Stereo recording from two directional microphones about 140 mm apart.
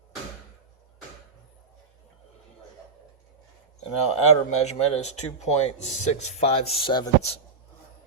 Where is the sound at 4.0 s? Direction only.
50° left (ahead or behind).